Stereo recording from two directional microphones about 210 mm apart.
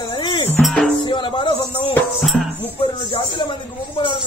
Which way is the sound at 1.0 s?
25° left (ahead or behind).